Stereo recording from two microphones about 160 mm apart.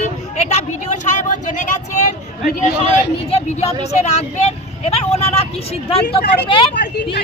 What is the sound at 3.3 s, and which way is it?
Speech, 45° left (ahead or behind).